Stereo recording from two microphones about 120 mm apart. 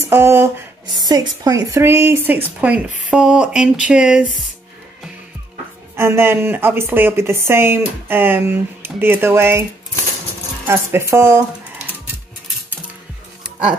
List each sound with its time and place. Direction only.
0.1 s a woman's voice: 20° right (ahead or behind)
1.0 s a woman's voice: 30° right (ahead or behind); by 4.3 s 5° right (ahead or behind)
5.9 s a woman's voice: 20° right (ahead or behind)
10.7 s a woman's voice: 20° right (ahead or behind)